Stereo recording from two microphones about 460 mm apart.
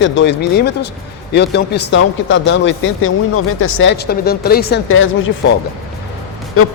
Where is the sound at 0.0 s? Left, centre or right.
Left.